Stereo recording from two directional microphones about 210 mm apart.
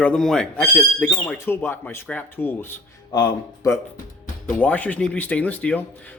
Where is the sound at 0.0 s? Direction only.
5° left (ahead or behind).